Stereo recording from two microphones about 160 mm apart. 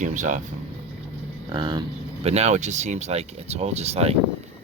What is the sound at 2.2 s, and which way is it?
Speech, 40° right (ahead or behind).